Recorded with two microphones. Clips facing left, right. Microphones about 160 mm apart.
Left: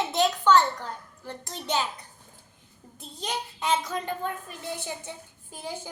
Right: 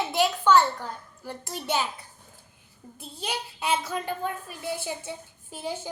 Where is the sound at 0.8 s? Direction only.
10° right (ahead or behind).